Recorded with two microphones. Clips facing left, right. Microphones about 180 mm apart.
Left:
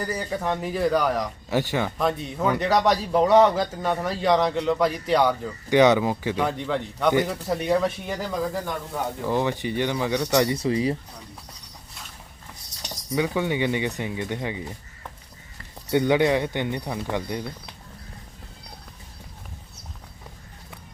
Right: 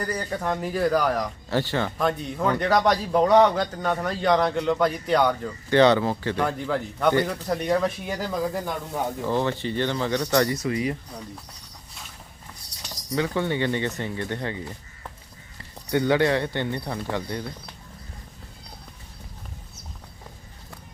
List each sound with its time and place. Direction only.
0.0 s a man's voice: 5° left (ahead or behind)
1.5 s speech: 15° left (ahead or behind)
2.0 s a man's voice: centre (ahead or behind)
5.7 s speech: 15° left (ahead or behind)
6.4 s a man's voice: centre (ahead or behind)
7.1 s a man's voice: 15° left (ahead or behind); by 8.7 s 5° right (ahead or behind)
9.2 s speech: 15° left (ahead or behind)
10.5 s speech: 30° left (ahead or behind)
12.8 s speech: 15° left (ahead or behind)
15.9 s speech: 20° left (ahead or behind)